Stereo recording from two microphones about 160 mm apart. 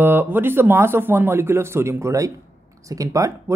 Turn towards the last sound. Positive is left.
turn(degrees=-20)  # may be behind; listen again after turning